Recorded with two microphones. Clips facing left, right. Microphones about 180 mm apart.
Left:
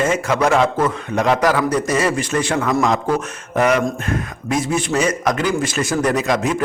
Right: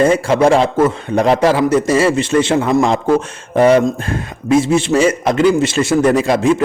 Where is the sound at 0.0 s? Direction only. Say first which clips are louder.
Right 6 dB; 30° right (ahead or behind).